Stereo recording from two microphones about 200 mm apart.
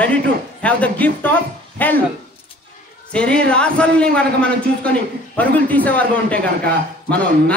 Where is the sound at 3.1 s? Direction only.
5° left (ahead or behind).